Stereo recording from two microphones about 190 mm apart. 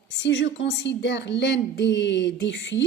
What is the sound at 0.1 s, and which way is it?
A woman's voice, 70° left (ahead or behind).